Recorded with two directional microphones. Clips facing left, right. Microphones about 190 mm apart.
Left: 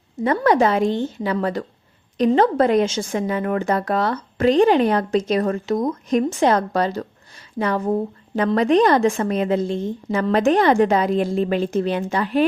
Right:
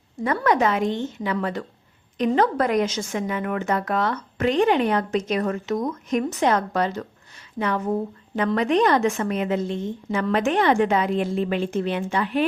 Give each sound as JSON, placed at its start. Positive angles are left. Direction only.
{"t": 0.2, "sound": "a woman's voice", "side_deg": 25}
{"t": 8.4, "sound": "a woman's voice", "side_deg": 35}